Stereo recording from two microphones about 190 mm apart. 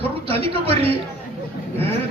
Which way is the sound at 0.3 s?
30° right (ahead or behind).